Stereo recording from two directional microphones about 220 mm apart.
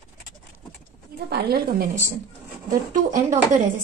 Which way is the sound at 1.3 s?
45° right (ahead or behind).